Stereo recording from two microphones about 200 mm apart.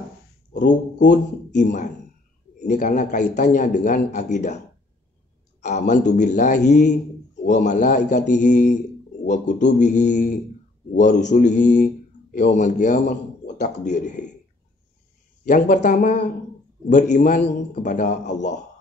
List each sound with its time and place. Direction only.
0.9 s a man's voice: 40° left (ahead or behind)
5.6 s a man's voice: 35° left (ahead or behind)
15.7 s a man's voice: 40° left (ahead or behind)